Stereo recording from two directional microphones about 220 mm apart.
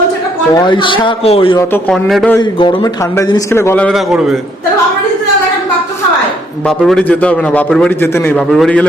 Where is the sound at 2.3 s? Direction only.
20° left (ahead or behind); by 4.4 s centre (ahead or behind).